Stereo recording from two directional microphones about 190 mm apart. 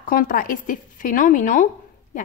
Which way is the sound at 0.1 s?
45° left (ahead or behind).